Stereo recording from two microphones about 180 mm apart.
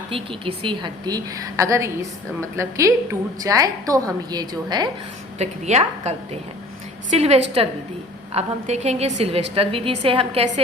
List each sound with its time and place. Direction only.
0.1 s a woman's voice: 30° right (ahead or behind)
5.4 s a woman's voice: 40° right (ahead or behind)